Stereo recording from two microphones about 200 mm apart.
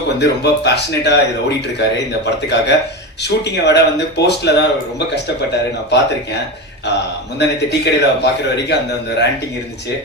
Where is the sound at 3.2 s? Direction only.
55° left (ahead or behind).